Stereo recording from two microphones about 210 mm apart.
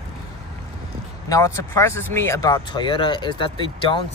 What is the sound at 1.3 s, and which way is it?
Speech, 15° left (ahead or behind).